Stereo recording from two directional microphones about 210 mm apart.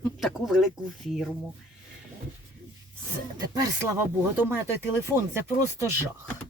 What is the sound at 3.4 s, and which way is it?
Speech, 20° right (ahead or behind).